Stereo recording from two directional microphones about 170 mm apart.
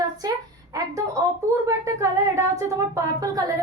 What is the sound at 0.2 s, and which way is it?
Speech, 20° right (ahead or behind).